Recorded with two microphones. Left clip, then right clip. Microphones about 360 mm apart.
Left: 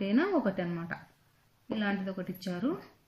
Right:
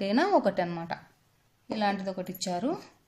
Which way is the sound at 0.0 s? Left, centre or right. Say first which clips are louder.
Right 5 dB; centre.